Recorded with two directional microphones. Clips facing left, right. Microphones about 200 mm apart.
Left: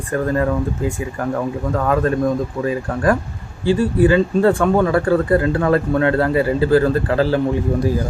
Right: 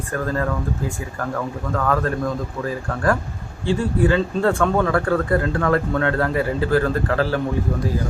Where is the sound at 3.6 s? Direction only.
5° left (ahead or behind).